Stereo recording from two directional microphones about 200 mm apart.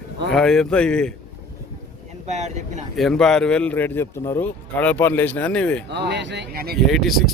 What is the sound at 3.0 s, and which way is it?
Speech, centre (ahead or behind).